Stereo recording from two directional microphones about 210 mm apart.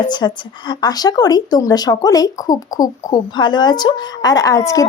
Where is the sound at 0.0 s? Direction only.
20° left (ahead or behind).